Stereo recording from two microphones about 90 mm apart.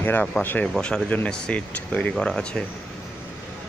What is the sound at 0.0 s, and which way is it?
Speech, 20° left (ahead or behind).